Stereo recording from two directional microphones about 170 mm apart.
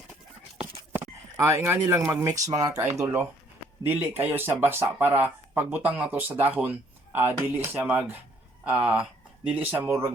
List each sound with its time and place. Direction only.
1.4 s speech: 15° right (ahead or behind)